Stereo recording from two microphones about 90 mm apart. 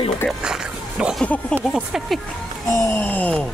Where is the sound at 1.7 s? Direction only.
5° right (ahead or behind).